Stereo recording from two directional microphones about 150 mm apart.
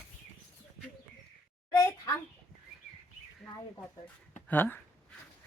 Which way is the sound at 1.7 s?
20° left (ahead or behind).